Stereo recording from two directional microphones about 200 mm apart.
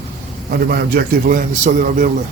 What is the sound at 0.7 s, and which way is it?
A man's voice, 50° right (ahead or behind).